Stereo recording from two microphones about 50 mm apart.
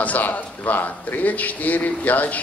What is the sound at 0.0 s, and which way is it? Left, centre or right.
Speech, left.